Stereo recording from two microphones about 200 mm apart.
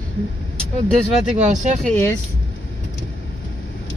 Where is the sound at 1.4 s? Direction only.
35° right (ahead or behind).